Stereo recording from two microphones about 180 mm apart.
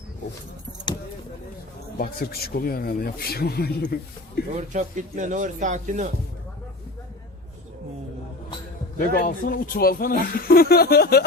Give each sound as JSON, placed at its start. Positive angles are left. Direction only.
{"t": 2.0, "sound": "speech", "side_deg": 55}
{"t": 4.5, "sound": "speech", "side_deg": -40}
{"t": 9.0, "sound": "speech", "side_deg": 50}